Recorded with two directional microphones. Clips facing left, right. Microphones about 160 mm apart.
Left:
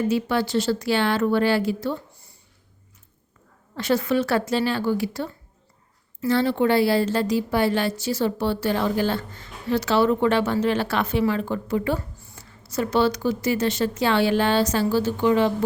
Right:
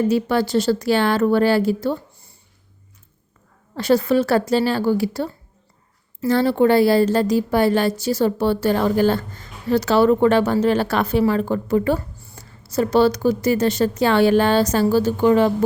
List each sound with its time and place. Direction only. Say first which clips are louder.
0.1 s speech: right 4 dB; 40° right (ahead or behind)
3.8 s a woman's voice: right 5 dB; 35° right (ahead or behind)